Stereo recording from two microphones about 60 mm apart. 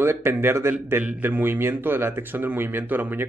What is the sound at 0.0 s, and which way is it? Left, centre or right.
Speech, right.